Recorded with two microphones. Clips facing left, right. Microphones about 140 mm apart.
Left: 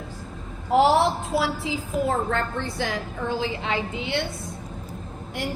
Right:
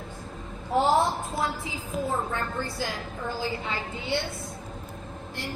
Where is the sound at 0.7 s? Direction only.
90° left.